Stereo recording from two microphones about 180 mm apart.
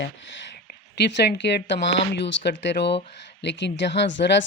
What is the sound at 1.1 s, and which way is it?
A woman's voice, 75° left (ahead or behind).